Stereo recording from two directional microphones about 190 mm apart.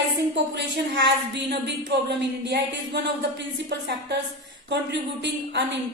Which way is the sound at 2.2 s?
65° right (ahead or behind).